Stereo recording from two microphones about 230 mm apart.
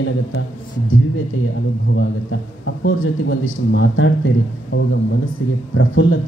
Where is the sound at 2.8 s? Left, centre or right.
Left.